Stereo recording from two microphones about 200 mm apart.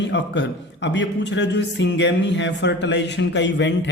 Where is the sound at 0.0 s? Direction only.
60° left (ahead or behind).